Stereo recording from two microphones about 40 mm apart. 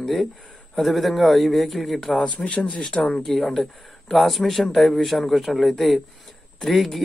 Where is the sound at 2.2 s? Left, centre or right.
Left.